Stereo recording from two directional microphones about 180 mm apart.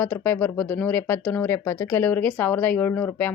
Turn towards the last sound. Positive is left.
turn(degrees=10)  # may be behind; listen again after turning